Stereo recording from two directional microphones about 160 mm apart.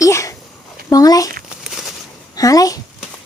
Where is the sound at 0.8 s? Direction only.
25° left (ahead or behind).